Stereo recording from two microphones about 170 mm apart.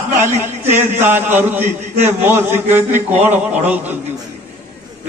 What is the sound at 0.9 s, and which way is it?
A man's voice, 10° right (ahead or behind).